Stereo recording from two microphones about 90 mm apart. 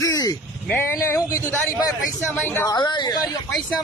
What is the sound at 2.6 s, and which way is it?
Speech, 55° left (ahead or behind).